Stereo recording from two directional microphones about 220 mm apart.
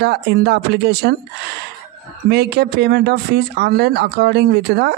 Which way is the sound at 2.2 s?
50° right (ahead or behind).